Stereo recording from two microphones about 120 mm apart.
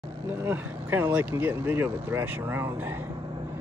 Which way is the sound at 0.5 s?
15° right (ahead or behind).